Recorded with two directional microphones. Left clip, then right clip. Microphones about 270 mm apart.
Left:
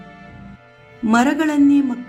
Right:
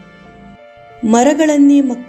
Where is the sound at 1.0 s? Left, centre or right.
Centre.